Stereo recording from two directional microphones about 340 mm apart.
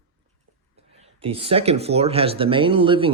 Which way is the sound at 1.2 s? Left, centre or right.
Centre.